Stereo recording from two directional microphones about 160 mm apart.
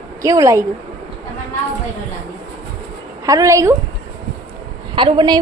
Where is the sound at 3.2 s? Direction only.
20° right (ahead or behind).